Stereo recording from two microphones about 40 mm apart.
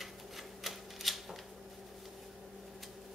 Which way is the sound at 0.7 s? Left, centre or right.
Centre.